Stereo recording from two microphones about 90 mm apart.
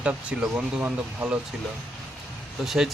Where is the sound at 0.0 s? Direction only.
10° right (ahead or behind).